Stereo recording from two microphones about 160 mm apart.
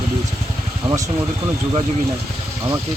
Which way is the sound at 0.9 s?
30° right (ahead or behind).